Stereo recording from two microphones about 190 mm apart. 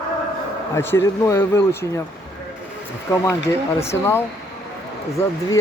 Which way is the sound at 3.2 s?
15° left (ahead or behind).